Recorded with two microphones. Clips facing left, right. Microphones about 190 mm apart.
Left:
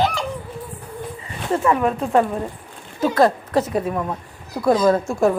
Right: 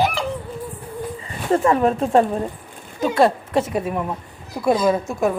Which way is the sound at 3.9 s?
10° right (ahead or behind).